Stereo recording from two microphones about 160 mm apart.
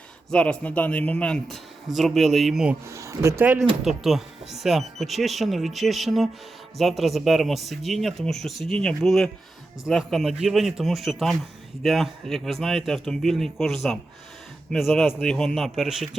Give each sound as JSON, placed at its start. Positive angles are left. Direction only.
{"t": 0.3, "sound": "speech", "side_deg": 5}
{"t": 2.8, "sound": "speech", "side_deg": -20}
{"t": 3.8, "sound": "speech", "side_deg": 0}